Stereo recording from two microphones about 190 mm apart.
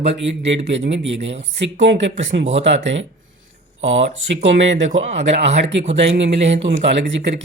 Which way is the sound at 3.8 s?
80° right.